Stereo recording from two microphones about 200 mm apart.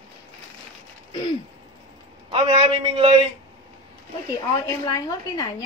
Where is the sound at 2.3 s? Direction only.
30° right (ahead or behind).